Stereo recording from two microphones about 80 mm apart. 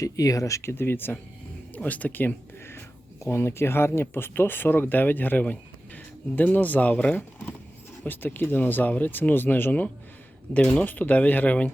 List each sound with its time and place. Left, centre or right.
0.0 s speech: left; by 11.7 s centre